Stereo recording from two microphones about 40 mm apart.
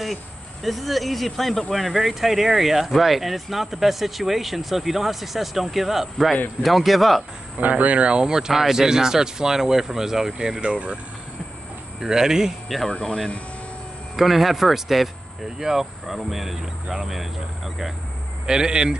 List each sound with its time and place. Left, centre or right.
0.7 s speech: centre
7.7 s speech: right
8.1 s speech: centre
12.0 s speech: centre
14.1 s speech: centre
18.5 s speech: centre